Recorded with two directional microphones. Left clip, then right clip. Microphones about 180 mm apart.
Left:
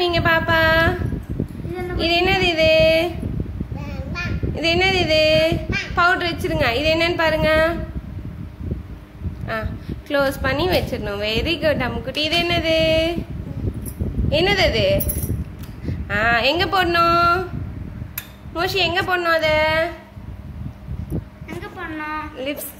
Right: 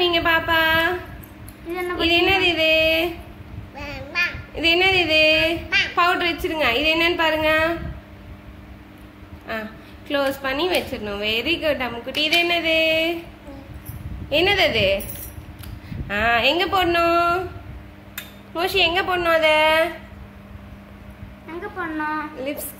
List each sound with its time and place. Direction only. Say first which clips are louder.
0.0 s a sound: left 1 dB; centre (ahead or behind)
2.0 s child singing: even; centre (ahead or behind)
9.5 s a woman's voice: left 3 dB; 5° left (ahead or behind)
14.3 s a woman's voice: even; centre (ahead or behind)
16.1 s a woman's voice: left 1 dB; centre (ahead or behind)
18.5 s a woman's voice: right 1 dB; 5° right (ahead or behind)
21.7 s a woman's voice: right 2 dB; 35° right (ahead or behind)
22.4 s a woman's voice: left 2 dB; centre (ahead or behind)